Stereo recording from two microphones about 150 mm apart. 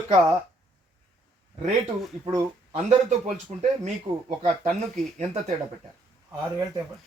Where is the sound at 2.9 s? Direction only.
50° right (ahead or behind).